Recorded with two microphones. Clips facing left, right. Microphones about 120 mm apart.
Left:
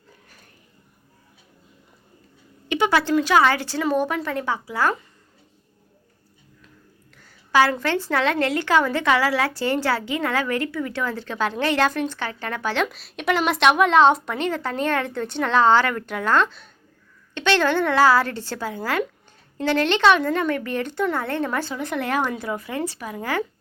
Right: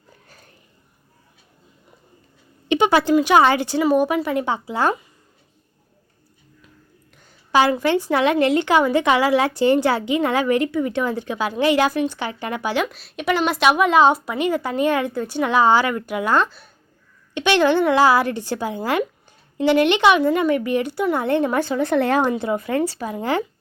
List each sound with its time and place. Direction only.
2.6 s a woman's voice: 20° right (ahead or behind)
7.2 s a woman's voice: 20° right (ahead or behind)
21.8 s speech: 30° right (ahead or behind)